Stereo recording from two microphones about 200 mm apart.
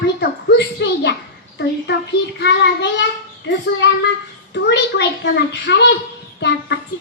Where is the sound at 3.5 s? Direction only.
60° left (ahead or behind).